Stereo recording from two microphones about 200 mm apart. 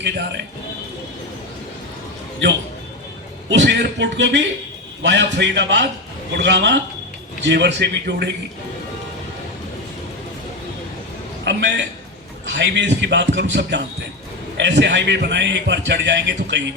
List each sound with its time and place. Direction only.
3.5 s a man's voice: 60° right (ahead or behind)
11.5 s a man's voice: 60° right (ahead or behind)